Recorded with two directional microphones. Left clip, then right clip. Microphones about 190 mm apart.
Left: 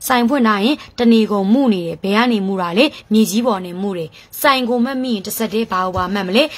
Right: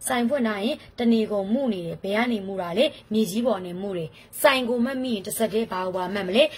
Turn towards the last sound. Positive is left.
turn(degrees=25)  # may be behind; listen again after turning